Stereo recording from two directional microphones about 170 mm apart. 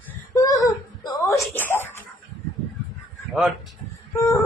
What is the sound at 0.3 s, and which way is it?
Whimper, 20° left (ahead or behind).